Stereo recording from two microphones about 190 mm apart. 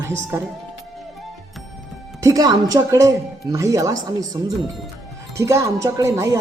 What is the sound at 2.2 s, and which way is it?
A woman's voice, 20° right (ahead or behind).